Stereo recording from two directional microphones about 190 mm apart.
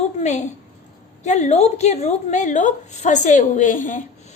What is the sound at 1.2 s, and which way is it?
A woman's voice, 35° left (ahead or behind).